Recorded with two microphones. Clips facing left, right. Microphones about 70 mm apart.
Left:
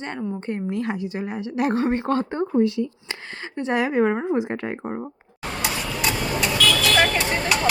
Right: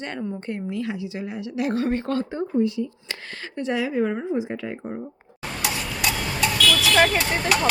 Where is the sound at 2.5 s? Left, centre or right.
Left.